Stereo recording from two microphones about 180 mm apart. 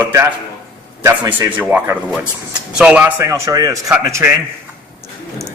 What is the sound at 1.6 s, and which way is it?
A man's voice, 10° right (ahead or behind).